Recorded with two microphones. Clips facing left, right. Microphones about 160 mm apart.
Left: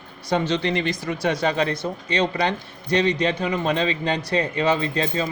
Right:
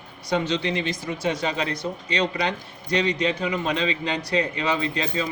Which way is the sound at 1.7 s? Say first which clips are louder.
Left 2 dB; 30° left (ahead or behind).